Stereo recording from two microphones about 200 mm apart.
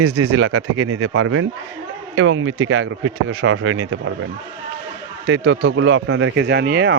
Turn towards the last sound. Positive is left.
turn(degrees=-55)  # may be behind; listen again after turning